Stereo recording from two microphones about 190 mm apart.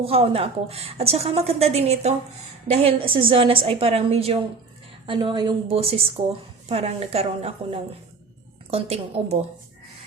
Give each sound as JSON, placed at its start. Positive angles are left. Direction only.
{"t": 0.0, "sound": "a woman's voice", "side_deg": -30}